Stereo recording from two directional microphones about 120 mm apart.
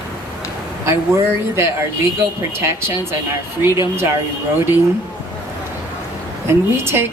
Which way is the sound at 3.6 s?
20° right (ahead or behind).